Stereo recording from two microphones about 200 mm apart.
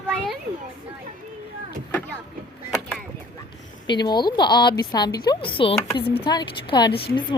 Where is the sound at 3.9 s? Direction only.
20° left (ahead or behind).